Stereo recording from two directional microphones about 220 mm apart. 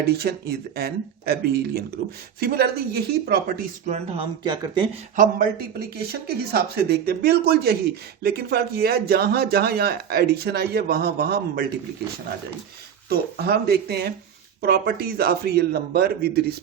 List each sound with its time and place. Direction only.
0.1 s speech: 45° right (ahead or behind)
3.9 s speech: 25° right (ahead or behind)
5.1 s speech: 40° right (ahead or behind)
13.1 s speech: 45° right (ahead or behind)